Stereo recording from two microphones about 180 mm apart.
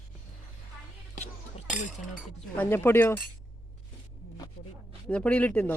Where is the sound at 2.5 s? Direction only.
10° left (ahead or behind).